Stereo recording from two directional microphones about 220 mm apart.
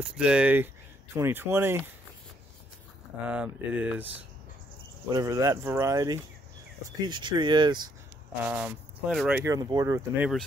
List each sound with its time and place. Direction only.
0.0 s speech: 5° right (ahead or behind)
3.3 s speech: 5° right (ahead or behind)
5.1 s speech: 15° right (ahead or behind)
8.5 s speech: 5° right (ahead or behind)
9.4 s speech: 15° right (ahead or behind)